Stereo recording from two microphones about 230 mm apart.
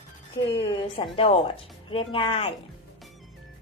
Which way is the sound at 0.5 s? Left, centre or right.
Left.